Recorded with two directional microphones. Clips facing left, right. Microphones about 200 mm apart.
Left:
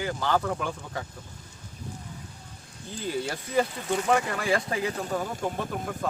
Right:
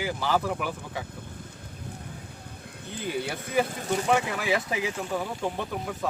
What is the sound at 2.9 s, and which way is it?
Speech, 60° right (ahead or behind).